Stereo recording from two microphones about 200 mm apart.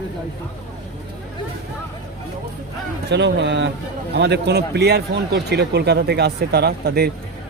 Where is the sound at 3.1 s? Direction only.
60° right (ahead or behind).